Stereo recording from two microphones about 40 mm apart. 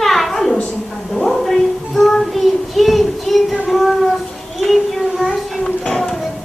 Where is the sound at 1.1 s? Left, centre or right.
Centre.